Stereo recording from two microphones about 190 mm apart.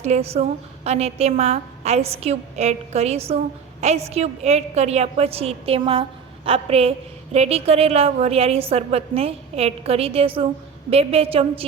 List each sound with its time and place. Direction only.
0.0 s a woman's voice: 35° right (ahead or behind)